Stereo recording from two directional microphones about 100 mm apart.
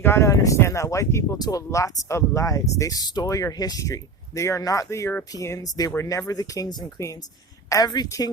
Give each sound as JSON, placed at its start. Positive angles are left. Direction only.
{"t": 0.0, "sound": "speech", "side_deg": 25}